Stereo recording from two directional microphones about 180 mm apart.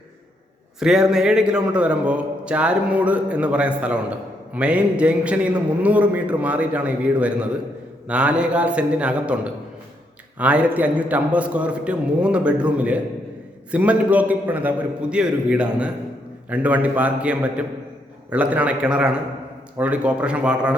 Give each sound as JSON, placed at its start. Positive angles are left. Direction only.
{"t": 0.8, "sound": "a man's voice", "side_deg": -5}